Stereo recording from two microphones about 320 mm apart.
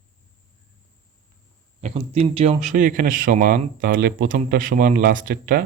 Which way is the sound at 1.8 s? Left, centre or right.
Centre.